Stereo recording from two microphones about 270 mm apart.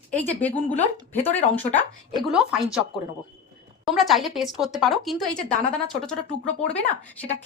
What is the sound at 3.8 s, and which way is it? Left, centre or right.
Speech, centre.